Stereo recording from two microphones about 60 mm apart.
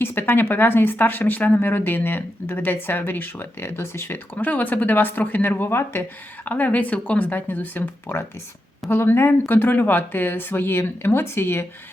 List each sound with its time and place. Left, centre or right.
0.0 s speech: left
4.4 s speech: left